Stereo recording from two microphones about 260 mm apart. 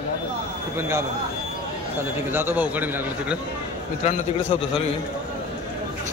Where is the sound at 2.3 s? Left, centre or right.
Centre.